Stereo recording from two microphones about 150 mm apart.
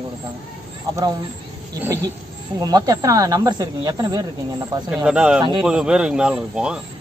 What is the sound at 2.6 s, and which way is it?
Speech, 25° right (ahead or behind).